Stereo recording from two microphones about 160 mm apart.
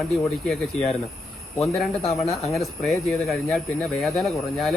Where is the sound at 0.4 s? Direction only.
5° left (ahead or behind).